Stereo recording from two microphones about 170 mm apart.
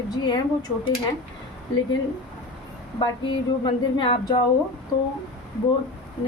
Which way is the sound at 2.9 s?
30° left (ahead or behind).